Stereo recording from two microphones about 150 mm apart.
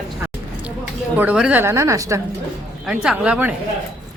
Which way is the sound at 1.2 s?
10° right (ahead or behind).